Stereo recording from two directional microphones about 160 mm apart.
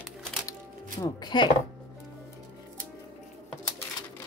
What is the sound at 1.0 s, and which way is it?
Speech, 25° left (ahead or behind).